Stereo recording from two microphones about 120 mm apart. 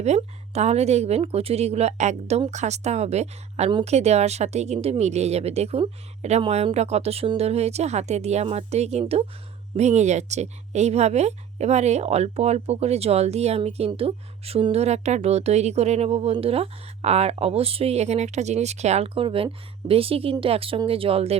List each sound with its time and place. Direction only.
0.0 s speech: 65° right (ahead or behind)
9.7 s speech: 70° right (ahead or behind); by 21.3 s 55° right (ahead or behind)